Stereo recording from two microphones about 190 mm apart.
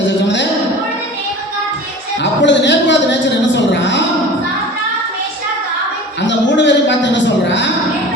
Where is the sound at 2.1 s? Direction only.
70° left (ahead or behind).